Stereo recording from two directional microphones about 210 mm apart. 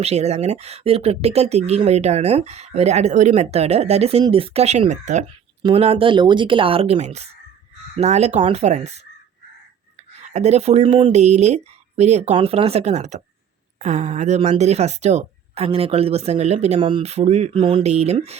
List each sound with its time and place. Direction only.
0.0 s speech: 30° right (ahead or behind)
10.2 s speech: 30° right (ahead or behind)